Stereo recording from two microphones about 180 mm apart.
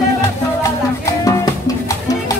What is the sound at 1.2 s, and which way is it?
Music, 20° left (ahead or behind).